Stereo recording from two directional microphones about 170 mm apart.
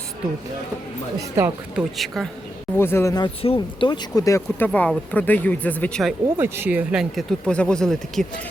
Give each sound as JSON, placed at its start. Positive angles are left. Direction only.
{"t": 1.4, "sound": "speech", "side_deg": 0}
{"t": 2.7, "sound": "speech", "side_deg": 15}
{"t": 3.4, "sound": "speech", "side_deg": 30}
{"t": 6.2, "sound": "speech", "side_deg": -15}